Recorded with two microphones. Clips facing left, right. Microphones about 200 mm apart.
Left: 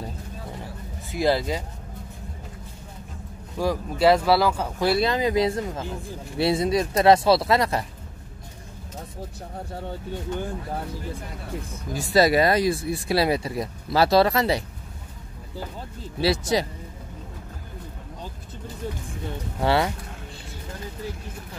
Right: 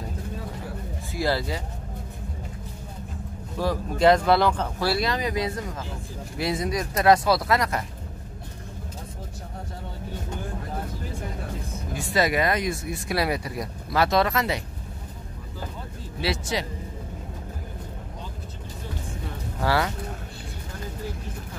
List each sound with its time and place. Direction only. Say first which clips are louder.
1.1 s speech: left 4 dB; 20° left (ahead or behind)
3.5 s speech: left 1 dB; 10° left (ahead or behind)
4.8 s speech: left 4 dB; 25° left (ahead or behind)
11.9 s speech: left 5 dB; 35° left (ahead or behind)
16.2 s speech: left 5 dB; 35° left (ahead or behind)
19.6 s speech: left 3 dB; 25° left (ahead or behind)